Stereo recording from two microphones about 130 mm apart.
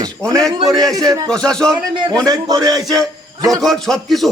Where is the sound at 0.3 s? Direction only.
5° left (ahead or behind).